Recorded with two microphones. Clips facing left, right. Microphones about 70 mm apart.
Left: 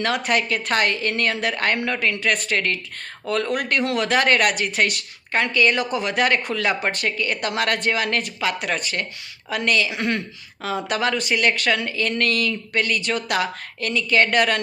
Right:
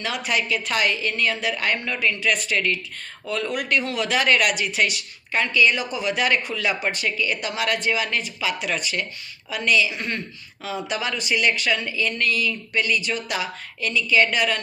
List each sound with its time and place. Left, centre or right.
0.0 s a woman's voice: left